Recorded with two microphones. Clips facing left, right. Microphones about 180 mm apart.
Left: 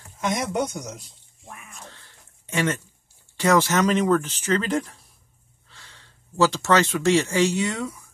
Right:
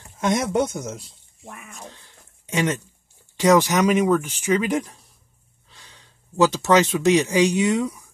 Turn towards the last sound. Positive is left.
turn(degrees=-15)  # may be behind; listen again after turning